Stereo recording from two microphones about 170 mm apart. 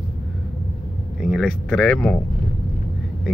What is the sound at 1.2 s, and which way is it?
Speech, 5° right (ahead or behind).